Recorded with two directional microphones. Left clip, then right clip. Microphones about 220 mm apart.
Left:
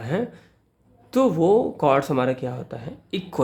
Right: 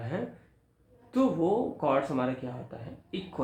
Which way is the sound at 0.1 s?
55° left (ahead or behind).